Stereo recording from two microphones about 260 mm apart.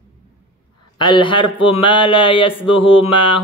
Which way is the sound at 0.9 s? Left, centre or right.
Centre.